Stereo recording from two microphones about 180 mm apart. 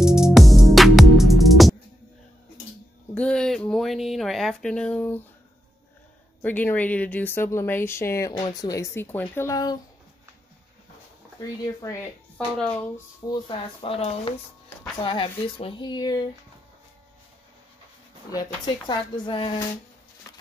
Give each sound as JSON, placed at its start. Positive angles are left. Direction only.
{"t": 0.0, "sound": "music", "side_deg": -5}
{"t": 3.2, "sound": "speech", "side_deg": 5}
{"t": 6.4, "sound": "speech", "side_deg": 10}
{"t": 11.6, "sound": "speech", "side_deg": 15}
{"t": 13.3, "sound": "speech", "side_deg": 30}
{"t": 18.3, "sound": "speech", "side_deg": 20}